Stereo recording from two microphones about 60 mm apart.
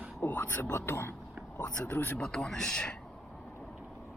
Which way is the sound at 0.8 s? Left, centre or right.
Left.